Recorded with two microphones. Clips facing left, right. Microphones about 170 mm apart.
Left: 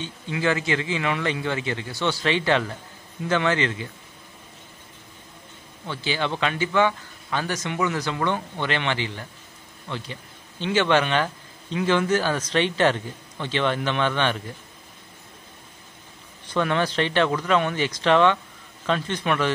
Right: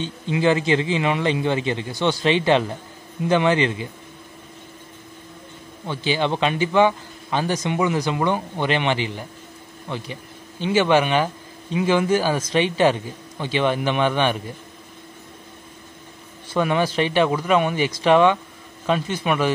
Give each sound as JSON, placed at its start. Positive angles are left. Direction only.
{"t": 0.0, "sound": "a man's voice", "side_deg": -20}
{"t": 5.9, "sound": "speech", "side_deg": -15}
{"t": 16.4, "sound": "speech", "side_deg": -10}